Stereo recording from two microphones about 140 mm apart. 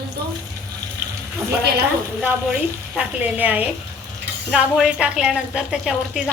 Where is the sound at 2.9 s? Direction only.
10° right (ahead or behind).